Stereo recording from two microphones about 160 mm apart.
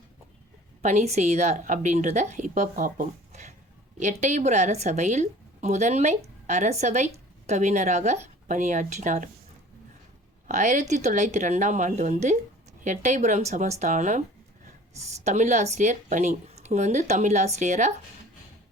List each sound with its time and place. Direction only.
0.8 s a woman's voice: 50° right (ahead or behind)
10.5 s a woman's voice: 50° right (ahead or behind)
15.2 s a woman's voice: 45° right (ahead or behind)